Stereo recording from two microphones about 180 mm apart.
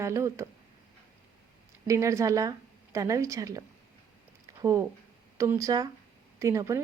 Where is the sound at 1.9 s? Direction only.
15° right (ahead or behind).